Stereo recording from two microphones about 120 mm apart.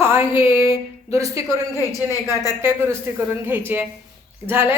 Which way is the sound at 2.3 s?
30° left (ahead or behind).